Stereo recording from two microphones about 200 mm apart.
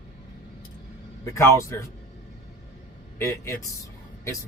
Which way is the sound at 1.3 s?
15° left (ahead or behind).